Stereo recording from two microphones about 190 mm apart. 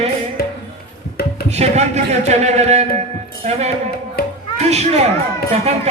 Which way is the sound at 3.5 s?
35° right (ahead or behind).